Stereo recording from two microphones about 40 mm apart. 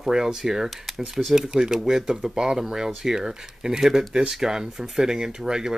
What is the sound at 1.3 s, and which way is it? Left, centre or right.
Speech, centre.